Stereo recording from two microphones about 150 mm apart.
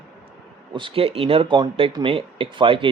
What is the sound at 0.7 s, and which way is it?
Speech, 35° right (ahead or behind).